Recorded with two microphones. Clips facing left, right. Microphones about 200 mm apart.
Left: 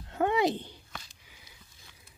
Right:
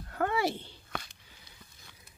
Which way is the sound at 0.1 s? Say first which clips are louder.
Left 4 dB; 20° left (ahead or behind).